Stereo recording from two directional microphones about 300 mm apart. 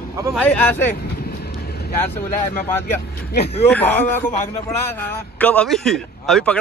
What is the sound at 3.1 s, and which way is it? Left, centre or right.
Speech, left.